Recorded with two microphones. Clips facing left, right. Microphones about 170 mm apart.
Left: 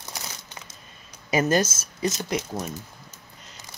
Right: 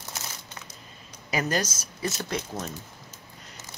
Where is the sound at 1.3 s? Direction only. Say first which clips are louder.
Left 6 dB; 25° left (ahead or behind).